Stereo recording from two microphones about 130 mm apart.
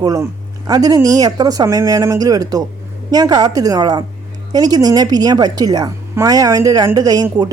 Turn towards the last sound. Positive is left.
turn(degrees=-30)  # may be behind; listen again after turning